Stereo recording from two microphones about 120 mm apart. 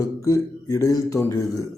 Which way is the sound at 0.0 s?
30° left (ahead or behind).